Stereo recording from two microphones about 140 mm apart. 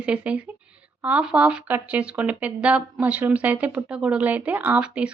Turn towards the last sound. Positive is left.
turn(degrees=-10)  # may be behind; listen again after turning